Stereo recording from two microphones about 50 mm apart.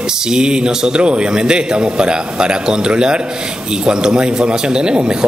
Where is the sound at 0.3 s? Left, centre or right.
Centre.